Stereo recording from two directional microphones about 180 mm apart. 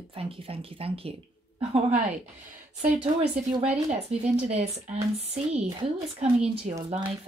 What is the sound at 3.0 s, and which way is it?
Speech, 35° right (ahead or behind).